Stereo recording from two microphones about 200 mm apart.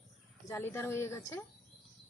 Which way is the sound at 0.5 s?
10° left (ahead or behind).